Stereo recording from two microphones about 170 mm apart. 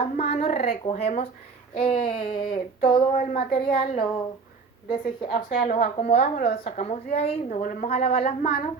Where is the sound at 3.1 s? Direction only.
50° left (ahead or behind).